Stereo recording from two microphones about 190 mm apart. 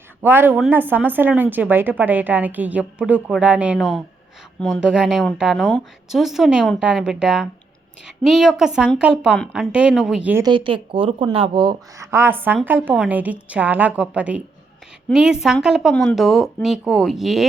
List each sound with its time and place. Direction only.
0.2 s speech: 10° right (ahead or behind)
10.4 s speech: 25° right (ahead or behind); by 17.4 s centre (ahead or behind)